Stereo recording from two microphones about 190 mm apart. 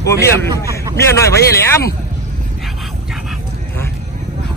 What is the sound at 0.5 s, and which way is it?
Speech, 20° right (ahead or behind).